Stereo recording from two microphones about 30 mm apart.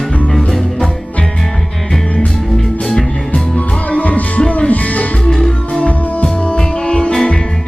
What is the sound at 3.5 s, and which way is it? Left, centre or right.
Music, left.